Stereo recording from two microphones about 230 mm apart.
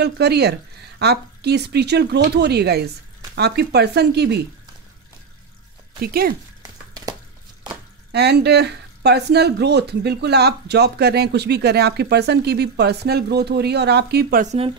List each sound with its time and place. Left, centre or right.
0.0 s speech: right
5.9 s speech: right
6.6 s a sound: centre
8.1 s speech: right